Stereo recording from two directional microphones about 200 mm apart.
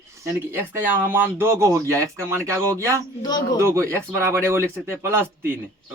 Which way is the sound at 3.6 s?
15° right (ahead or behind).